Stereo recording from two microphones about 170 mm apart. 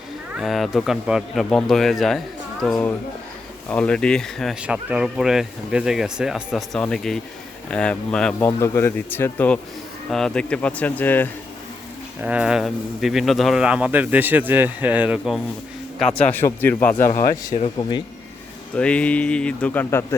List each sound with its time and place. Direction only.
0.3 s speech: centre (ahead or behind)
12.2 s speech: 5° right (ahead or behind)
16.1 s speech: 10° left (ahead or behind)
17.5 s speech: 30° left (ahead or behind)
18.8 s speech: 5° left (ahead or behind)